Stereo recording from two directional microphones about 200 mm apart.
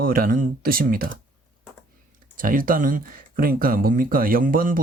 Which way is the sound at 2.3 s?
45° right (ahead or behind).